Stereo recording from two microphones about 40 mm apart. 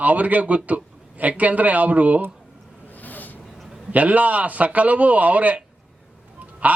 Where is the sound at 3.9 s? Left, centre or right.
Right.